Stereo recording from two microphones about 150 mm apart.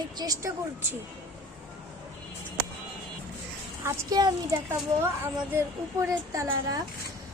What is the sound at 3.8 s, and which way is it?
Speech, 25° right (ahead or behind).